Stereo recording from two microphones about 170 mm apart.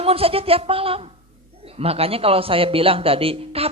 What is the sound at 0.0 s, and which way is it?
A woman's voice, 35° right (ahead or behind).